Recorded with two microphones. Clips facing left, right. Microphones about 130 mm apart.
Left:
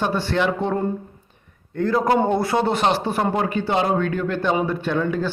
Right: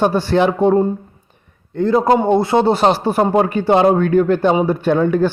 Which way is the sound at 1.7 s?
25° right (ahead or behind).